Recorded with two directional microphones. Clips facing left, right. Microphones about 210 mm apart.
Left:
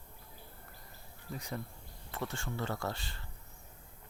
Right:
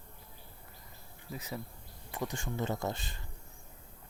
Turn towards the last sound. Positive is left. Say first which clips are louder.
# right 2 dB
turn(degrees=-20)  # may be behind; listen again after turning